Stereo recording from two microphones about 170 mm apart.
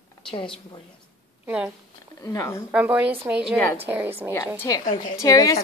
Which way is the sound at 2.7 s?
10° right (ahead or behind).